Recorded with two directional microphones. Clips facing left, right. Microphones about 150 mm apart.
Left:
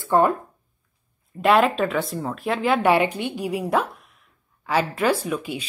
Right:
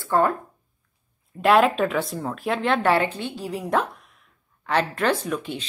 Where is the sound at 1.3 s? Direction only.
Centre (ahead or behind).